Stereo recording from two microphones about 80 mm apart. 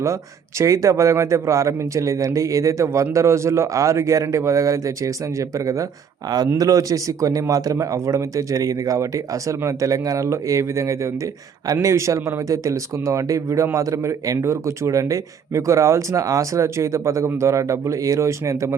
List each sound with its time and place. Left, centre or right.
0.6 s a man's voice: right